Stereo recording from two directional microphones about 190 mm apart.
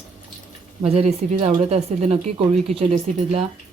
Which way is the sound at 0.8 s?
35° right (ahead or behind).